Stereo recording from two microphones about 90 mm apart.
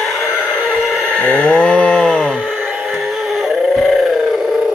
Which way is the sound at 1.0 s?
15° left (ahead or behind).